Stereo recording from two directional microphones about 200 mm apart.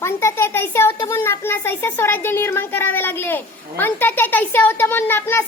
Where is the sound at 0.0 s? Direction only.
15° left (ahead or behind).